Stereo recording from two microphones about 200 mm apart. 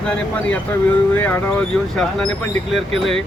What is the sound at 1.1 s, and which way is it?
Speech, 10° left (ahead or behind).